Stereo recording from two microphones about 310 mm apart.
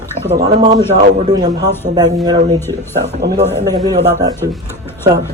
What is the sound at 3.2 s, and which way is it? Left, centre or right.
Speech, right.